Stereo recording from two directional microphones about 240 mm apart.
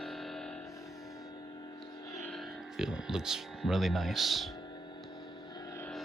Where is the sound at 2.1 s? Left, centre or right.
Centre.